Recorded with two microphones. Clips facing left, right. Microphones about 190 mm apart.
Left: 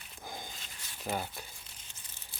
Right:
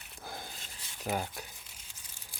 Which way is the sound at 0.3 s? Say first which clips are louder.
Even; 5° right (ahead or behind).